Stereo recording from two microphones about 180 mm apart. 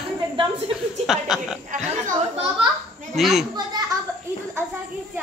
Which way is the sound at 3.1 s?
Centre (ahead or behind).